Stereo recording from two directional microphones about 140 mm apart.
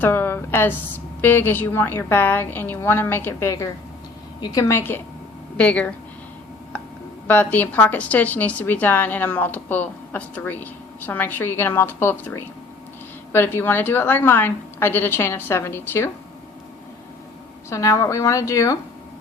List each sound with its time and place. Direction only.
0.0 s a woman's voice: 15° left (ahead or behind)
7.3 s a woman's voice: 10° left (ahead or behind)
17.7 s a woman's voice: 20° left (ahead or behind)